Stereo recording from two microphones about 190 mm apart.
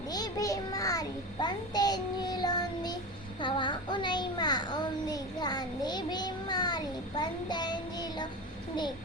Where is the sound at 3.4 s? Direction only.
25° left (ahead or behind).